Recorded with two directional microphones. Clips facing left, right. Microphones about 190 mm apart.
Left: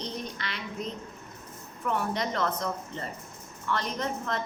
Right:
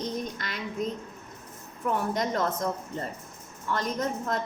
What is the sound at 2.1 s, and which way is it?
Speech, 45° right (ahead or behind).